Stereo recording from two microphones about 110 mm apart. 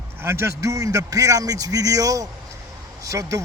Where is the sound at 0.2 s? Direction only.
25° right (ahead or behind).